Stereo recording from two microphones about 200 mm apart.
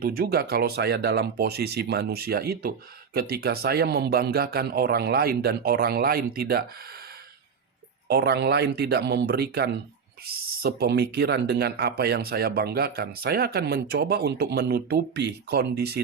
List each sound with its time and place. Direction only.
0.0 s speech: 45° right (ahead or behind)
8.0 s speech: 55° right (ahead or behind)